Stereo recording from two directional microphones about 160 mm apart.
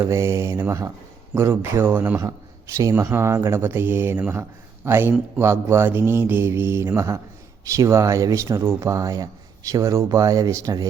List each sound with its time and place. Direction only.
0.0 s speech: 15° right (ahead or behind)